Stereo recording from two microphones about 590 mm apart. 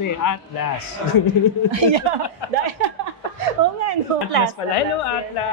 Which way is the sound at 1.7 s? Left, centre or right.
Right.